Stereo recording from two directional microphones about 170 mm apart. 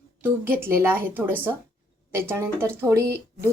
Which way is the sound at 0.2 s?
15° right (ahead or behind).